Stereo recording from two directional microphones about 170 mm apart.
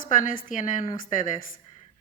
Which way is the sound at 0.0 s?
50° left (ahead or behind).